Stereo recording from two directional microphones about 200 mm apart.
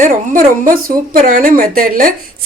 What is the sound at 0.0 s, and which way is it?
A woman's voice, 40° right (ahead or behind).